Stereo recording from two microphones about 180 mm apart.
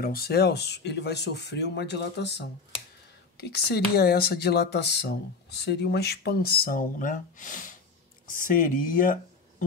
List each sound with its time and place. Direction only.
0.0 s speech: 55° left (ahead or behind)